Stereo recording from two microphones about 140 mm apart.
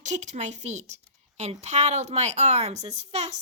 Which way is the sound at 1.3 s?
50° right (ahead or behind).